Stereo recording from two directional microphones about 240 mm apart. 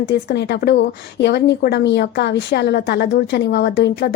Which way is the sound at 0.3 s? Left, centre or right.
Left.